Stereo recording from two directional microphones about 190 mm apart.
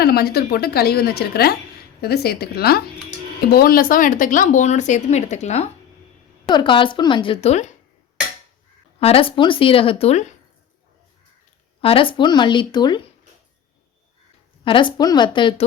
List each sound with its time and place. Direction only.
0.0 s a woman's voice: 55° left (ahead or behind); by 5.6 s 35° left (ahead or behind)
6.5 s a woman's voice: 25° left (ahead or behind)
9.0 s a woman's voice: 30° left (ahead or behind)
11.8 s a woman's voice: 30° left (ahead or behind)
14.6 s a woman's voice: 25° left (ahead or behind)